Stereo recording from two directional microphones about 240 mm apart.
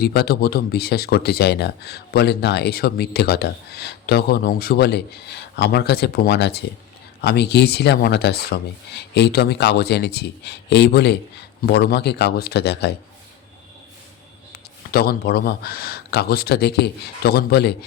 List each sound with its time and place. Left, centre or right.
0.0 s speech: left
14.5 s speech: left